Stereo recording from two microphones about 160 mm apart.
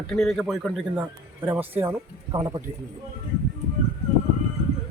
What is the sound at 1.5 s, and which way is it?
Speech, 10° right (ahead or behind).